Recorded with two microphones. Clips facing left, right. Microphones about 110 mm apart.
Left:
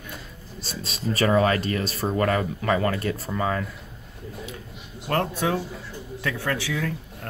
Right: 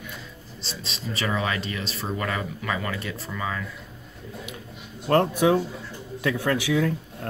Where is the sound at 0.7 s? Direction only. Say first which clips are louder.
Left 5 dB; 45° left (ahead or behind).